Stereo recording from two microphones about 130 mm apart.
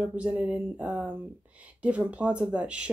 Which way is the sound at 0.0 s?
10° right (ahead or behind).